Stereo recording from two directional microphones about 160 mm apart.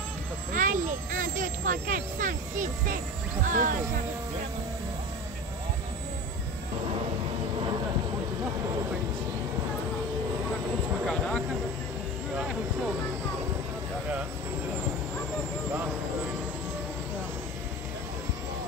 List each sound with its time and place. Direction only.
0.6 s speech: 55° right (ahead or behind)
11.1 s speech: 5° left (ahead or behind)